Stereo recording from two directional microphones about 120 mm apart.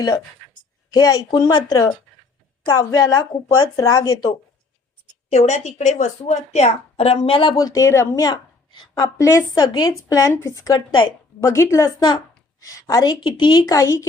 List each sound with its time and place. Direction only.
0.9 s a woman's voice: 30° left (ahead or behind)
5.3 s a woman's voice: 70° left (ahead or behind); by 7.5 s 45° left (ahead or behind)
7.5 s a woman's voice: 30° left (ahead or behind)
9.1 s a woman's voice: 25° left (ahead or behind)
11.4 s a woman's voice: 25° left (ahead or behind)